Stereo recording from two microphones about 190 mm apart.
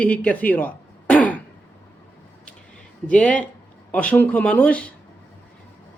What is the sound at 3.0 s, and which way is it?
Speech, 5° left (ahead or behind).